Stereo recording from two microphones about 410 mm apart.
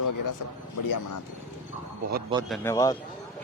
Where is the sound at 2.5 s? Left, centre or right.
Centre.